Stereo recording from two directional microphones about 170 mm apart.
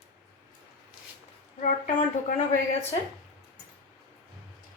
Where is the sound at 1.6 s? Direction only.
50° left (ahead or behind).